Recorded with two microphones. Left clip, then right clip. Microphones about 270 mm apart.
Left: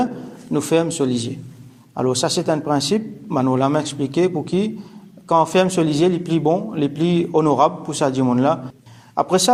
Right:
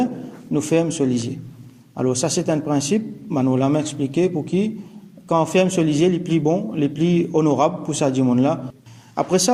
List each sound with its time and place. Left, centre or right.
0.5 s a man's voice: centre